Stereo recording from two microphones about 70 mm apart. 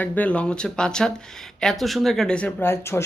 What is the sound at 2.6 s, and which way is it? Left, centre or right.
Speech, left.